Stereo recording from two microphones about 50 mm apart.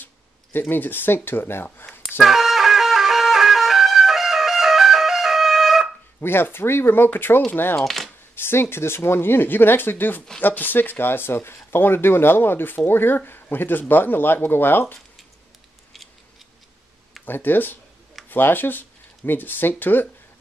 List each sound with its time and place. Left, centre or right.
0.0 s speech: left
2.1 s music: centre
6.2 s speech: left
7.8 s speech: centre
8.4 s speech: left
17.2 s speech: left